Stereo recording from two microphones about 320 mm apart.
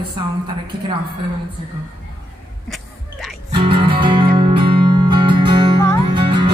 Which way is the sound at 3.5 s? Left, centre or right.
Centre.